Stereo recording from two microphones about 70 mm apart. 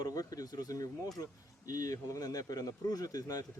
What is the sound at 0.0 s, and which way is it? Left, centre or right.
Speech, left.